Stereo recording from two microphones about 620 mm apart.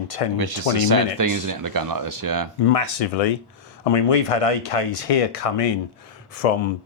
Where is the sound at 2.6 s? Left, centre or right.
Left.